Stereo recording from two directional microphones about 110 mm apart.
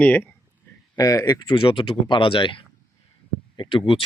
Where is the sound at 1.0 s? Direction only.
30° left (ahead or behind).